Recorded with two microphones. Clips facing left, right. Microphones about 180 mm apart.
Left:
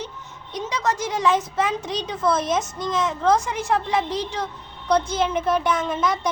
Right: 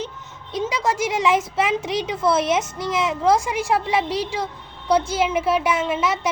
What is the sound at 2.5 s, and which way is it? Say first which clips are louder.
A woman's voice: right 2 dB; 10° right (ahead or behind).